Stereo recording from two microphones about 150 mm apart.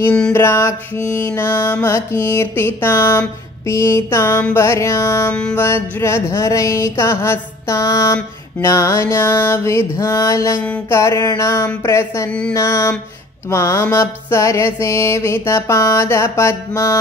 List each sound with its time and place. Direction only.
0.3 s music: 15° left (ahead or behind)
12.3 s music: 5° left (ahead or behind)
12.5 s music: 20° left (ahead or behind)